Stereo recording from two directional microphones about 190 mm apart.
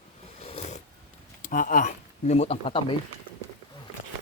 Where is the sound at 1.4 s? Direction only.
45° left (ahead or behind); by 2.9 s 30° left (ahead or behind).